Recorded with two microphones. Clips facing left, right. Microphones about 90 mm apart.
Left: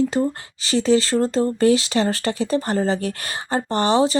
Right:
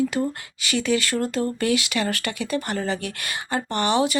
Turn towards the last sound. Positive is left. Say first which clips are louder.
# left 4 dB
turn(degrees=30)  # may be behind; listen again after turning